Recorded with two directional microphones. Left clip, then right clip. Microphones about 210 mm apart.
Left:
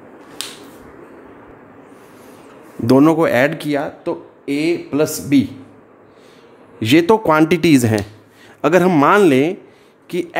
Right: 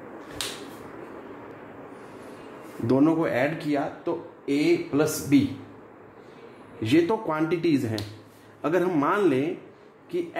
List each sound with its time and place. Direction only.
2.9 s speech: 55° left (ahead or behind)
6.8 s a man's voice: 55° left (ahead or behind)